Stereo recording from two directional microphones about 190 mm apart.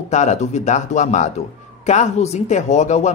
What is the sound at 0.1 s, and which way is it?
Speech, 40° left (ahead or behind).